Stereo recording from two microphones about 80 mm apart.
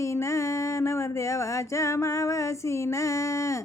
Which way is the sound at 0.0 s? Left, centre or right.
Left.